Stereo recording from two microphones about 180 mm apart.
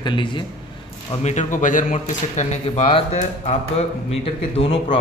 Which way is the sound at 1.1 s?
40° left (ahead or behind).